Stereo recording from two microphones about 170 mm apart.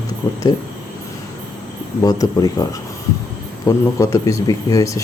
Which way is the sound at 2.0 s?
20° left (ahead or behind).